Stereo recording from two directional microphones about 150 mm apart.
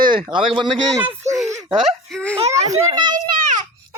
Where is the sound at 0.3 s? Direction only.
35° right (ahead or behind).